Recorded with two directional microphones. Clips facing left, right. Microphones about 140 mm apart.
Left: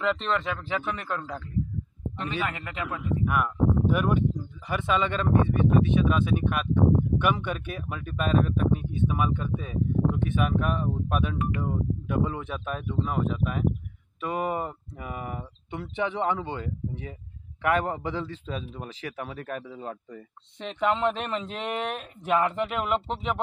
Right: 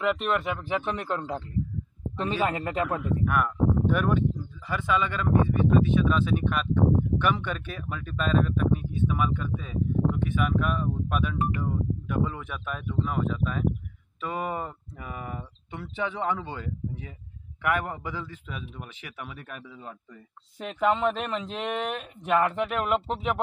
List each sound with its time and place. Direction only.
0.0 s speech: 10° right (ahead or behind)
2.1 s a man's voice: 35° right (ahead or behind)
3.3 s speech: 10° left (ahead or behind)
4.6 s a man's voice: 25° left (ahead or behind); by 20.0 s 40° left (ahead or behind)
20.5 s speech: 5° right (ahead or behind)